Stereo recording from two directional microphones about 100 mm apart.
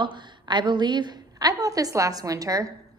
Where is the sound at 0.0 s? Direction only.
50° right (ahead or behind); by 2.7 s 35° right (ahead or behind).